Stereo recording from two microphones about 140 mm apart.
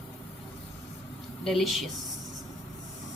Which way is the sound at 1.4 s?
Centre (ahead or behind).